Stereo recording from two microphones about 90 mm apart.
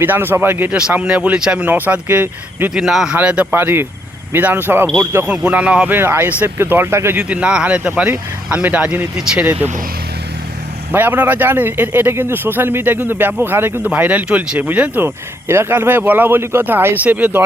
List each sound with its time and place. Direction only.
0.0 s speech: 25° right (ahead or behind)
0.8 s speech: 10° right (ahead or behind)
2.7 s a man's voice: 5° right (ahead or behind)
3.2 s speech: 15° right (ahead or behind)
7.3 s speech: 10° right (ahead or behind)
10.9 s speech: 20° right (ahead or behind)